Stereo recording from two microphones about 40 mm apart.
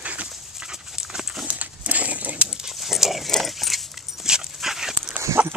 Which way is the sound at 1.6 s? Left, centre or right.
Right.